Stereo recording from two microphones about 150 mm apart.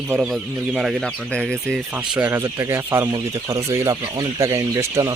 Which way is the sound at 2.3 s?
20° right (ahead or behind).